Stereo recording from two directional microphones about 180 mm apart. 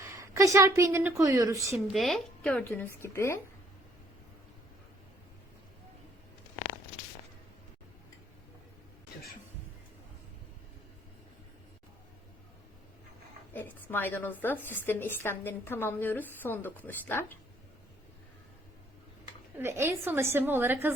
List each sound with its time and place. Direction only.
0.0 s a woman's voice: 15° right (ahead or behind)
1.7 s a woman's voice: centre (ahead or behind)
13.5 s a woman's voice: 10° left (ahead or behind)
19.5 s a woman's voice: 15° right (ahead or behind)